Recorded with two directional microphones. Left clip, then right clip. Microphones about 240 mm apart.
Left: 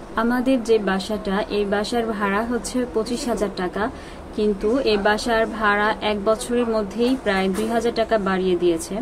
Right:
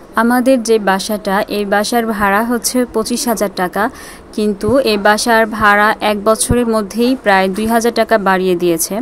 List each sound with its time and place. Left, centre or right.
0.1 s a woman's voice: right